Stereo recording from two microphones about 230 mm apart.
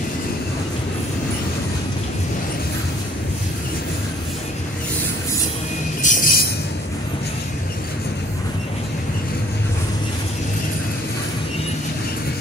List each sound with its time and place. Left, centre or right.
6.0 s train: left